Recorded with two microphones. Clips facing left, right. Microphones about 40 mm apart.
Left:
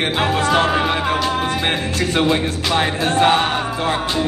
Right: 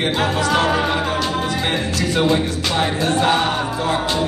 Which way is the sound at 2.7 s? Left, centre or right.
Left.